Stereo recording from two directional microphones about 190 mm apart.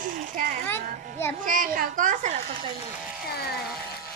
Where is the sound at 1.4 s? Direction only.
45° right (ahead or behind).